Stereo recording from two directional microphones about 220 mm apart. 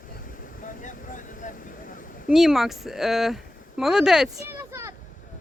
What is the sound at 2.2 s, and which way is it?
Speech, centre (ahead or behind).